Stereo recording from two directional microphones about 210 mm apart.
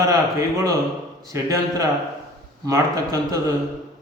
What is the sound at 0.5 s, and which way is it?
A man's voice, 15° right (ahead or behind).